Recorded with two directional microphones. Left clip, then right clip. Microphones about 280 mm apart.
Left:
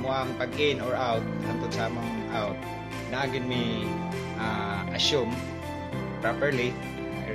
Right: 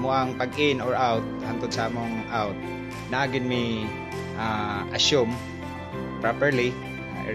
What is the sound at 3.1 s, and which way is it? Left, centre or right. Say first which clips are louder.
Speech: right 4 dB; right.